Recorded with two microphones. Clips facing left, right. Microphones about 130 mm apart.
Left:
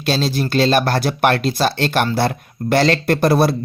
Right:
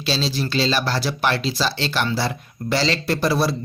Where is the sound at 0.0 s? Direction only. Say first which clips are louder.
Left 4 dB; 50° left (ahead or behind).